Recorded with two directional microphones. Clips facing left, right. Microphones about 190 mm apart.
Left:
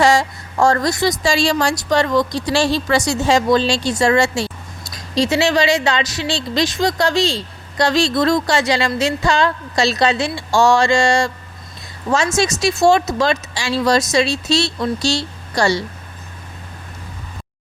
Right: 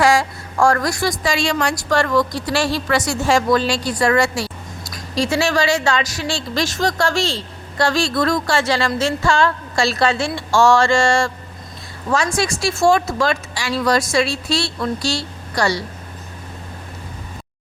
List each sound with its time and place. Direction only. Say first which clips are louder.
0.0 s a woman's voice: left 1 dB; 25° left (ahead or behind)
1.8 s a woman's voice: right 1 dB; 20° left (ahead or behind)
12.4 s speech: left 2 dB; 20° left (ahead or behind)